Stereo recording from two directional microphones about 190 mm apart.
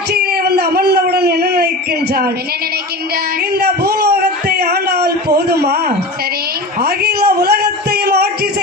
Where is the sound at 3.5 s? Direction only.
55° right (ahead or behind).